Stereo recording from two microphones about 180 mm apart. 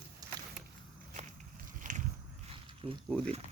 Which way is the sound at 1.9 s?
45° right (ahead or behind).